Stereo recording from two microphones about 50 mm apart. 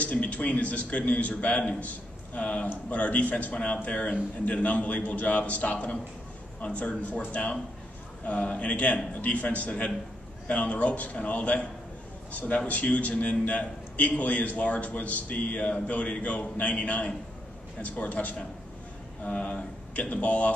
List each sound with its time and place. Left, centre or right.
0.0 s a man's voice: left
8.3 s a man's voice: left